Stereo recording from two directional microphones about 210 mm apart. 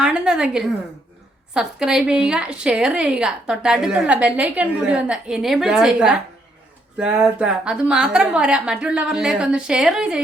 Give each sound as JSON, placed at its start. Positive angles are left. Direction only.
{"t": 0.0, "sound": "a woman's voice", "side_deg": -5}